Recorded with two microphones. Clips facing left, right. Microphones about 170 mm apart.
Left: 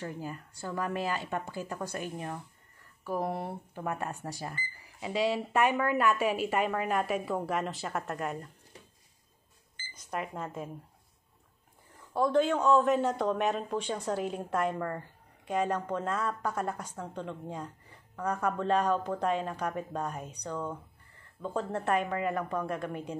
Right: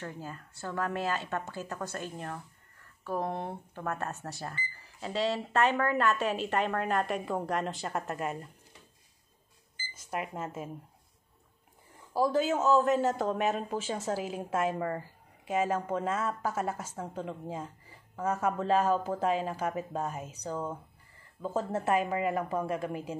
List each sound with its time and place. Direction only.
0.0 s speech: 10° left (ahead or behind)
10.1 s speech: 5° right (ahead or behind)
12.1 s speech: 5° right (ahead or behind)